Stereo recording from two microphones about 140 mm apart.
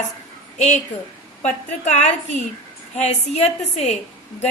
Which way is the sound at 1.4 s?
55° left (ahead or behind).